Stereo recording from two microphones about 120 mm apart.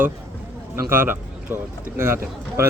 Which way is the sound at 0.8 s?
20° right (ahead or behind).